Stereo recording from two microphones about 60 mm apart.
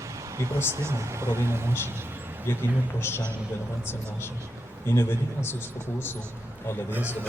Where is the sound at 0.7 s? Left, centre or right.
Right.